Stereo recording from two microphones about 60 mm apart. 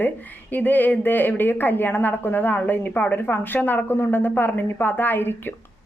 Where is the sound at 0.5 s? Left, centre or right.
Left.